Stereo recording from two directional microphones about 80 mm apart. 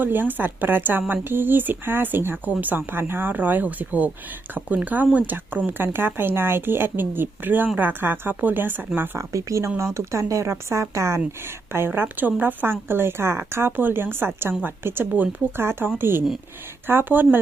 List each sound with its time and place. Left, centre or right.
0.0 s speech: right
9.0 s speech: right